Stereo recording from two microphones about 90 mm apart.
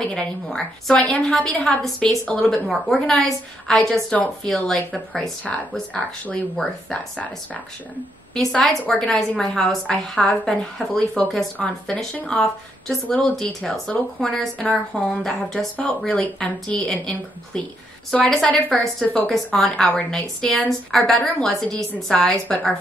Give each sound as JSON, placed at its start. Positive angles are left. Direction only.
{"t": 0.0, "sound": "a woman's voice", "side_deg": 10}
{"t": 5.4, "sound": "a woman's voice", "side_deg": 15}
{"t": 8.5, "sound": "a woman's voice", "side_deg": 10}